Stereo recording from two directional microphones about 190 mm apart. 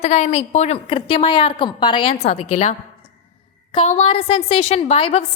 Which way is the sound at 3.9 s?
35° left (ahead or behind).